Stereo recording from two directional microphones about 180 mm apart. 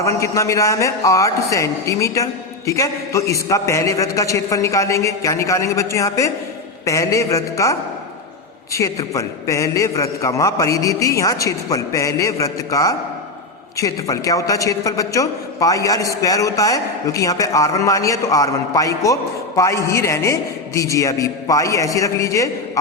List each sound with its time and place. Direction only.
0.0 s a man's voice: 15° left (ahead or behind)